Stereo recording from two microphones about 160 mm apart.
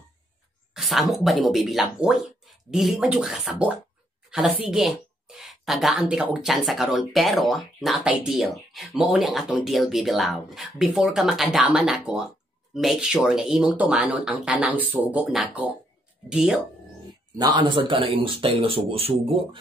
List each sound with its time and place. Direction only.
0.7 s speech: centre (ahead or behind)
17.4 s speech: 30° right (ahead or behind)